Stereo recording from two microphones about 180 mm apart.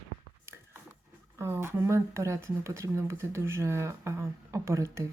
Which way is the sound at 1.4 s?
15° right (ahead or behind).